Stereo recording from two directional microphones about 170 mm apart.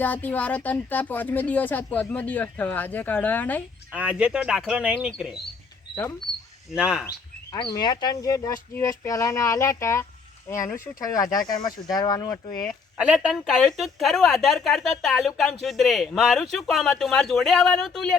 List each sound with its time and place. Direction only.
0.0 s speech: 10° left (ahead or behind)
3.9 s speech: 5° right (ahead or behind)
6.7 s speech: 5° right (ahead or behind)
7.5 s speech: 25° left (ahead or behind)
13.0 s speech: 5° right (ahead or behind)